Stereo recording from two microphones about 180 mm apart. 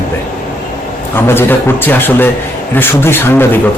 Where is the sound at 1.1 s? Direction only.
10° left (ahead or behind).